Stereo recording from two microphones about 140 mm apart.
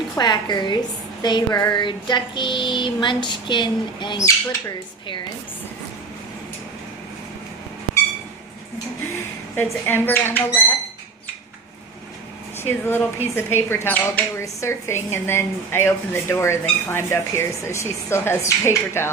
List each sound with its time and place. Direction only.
0.2 s a sound: 30° left (ahead or behind)
9.8 s speech: 15° left (ahead or behind)
12.5 s speech: 15° left (ahead or behind)